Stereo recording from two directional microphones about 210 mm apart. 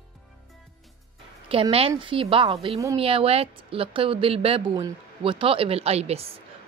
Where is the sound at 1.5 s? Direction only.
25° right (ahead or behind).